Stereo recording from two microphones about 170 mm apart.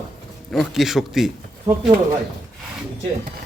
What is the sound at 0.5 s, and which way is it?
Speech, centre (ahead or behind).